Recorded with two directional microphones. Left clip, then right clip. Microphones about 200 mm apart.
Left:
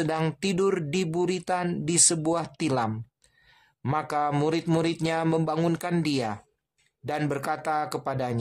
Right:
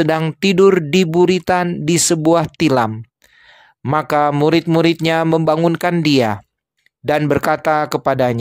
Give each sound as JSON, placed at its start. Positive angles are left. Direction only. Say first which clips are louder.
{"t": 0.4, "sound": "speech", "louder": "right 14 dB", "side_deg": -35}
{"t": 3.9, "sound": "speech", "louder": "right 11 dB", "side_deg": -35}